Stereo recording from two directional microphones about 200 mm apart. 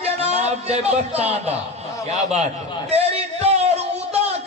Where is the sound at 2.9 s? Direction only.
30° right (ahead or behind).